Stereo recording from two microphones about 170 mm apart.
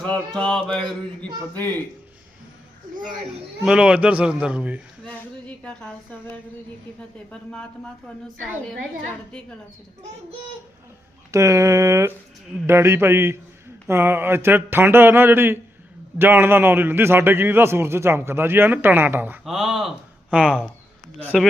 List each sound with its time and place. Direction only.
0.0 s a man's voice: 5° left (ahead or behind)
3.6 s a man's voice: 5° right (ahead or behind)
5.0 s speech: 5° left (ahead or behind)
7.3 s a man's voice: 5° left (ahead or behind)
11.3 s a man's voice: 20° right (ahead or behind)
21.2 s speech: 10° left (ahead or behind)